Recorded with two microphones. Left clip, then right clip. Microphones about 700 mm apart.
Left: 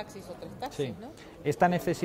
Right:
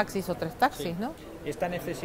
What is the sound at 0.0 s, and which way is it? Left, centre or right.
Speech, right.